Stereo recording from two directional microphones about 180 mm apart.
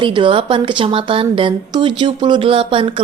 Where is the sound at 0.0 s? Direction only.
25° right (ahead or behind).